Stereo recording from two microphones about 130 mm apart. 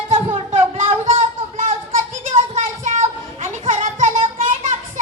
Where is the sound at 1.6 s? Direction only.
75° right (ahead or behind).